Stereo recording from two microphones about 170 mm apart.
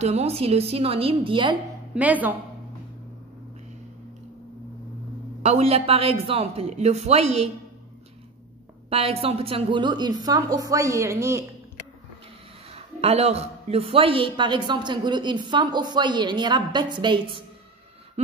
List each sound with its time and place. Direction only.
0.0 s a man's voice: 40° right (ahead or behind)
2.0 s speech: 10° right (ahead or behind)
5.4 s a man's voice: 40° right (ahead or behind)
8.9 s a man's voice: 35° right (ahead or behind); by 11.4 s 15° right (ahead or behind)
12.7 s a man's voice: 35° right (ahead or behind)